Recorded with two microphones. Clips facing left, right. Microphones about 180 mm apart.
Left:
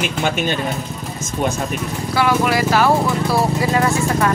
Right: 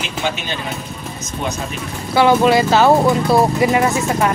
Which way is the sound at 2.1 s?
25° right (ahead or behind).